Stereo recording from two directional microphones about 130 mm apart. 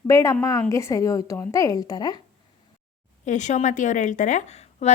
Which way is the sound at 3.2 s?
70° left (ahead or behind).